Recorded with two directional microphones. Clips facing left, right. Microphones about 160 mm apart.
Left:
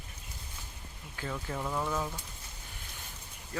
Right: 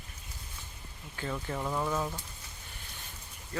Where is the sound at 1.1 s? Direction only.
Centre (ahead or behind).